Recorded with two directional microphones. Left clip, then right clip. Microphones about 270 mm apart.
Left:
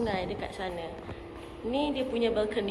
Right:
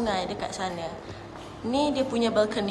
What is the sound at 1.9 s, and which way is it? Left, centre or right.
Speech, centre.